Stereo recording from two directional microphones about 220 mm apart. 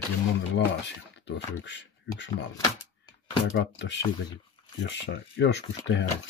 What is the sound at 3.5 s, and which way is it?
Speech, 55° left (ahead or behind).